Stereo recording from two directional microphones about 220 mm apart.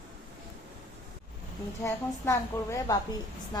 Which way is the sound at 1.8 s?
15° left (ahead or behind).